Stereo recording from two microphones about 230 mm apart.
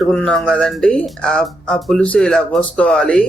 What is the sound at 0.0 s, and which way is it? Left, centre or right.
Speech, centre.